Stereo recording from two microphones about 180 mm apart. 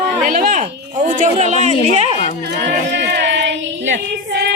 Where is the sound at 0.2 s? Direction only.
45° right (ahead or behind).